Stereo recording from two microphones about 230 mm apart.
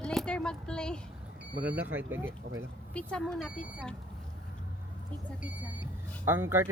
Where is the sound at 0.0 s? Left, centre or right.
Centre.